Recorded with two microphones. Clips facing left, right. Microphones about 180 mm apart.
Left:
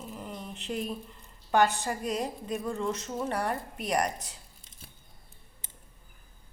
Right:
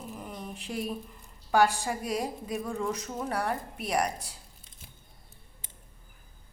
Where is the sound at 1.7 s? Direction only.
10° right (ahead or behind).